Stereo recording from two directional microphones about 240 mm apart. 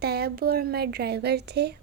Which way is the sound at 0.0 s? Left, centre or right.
Right.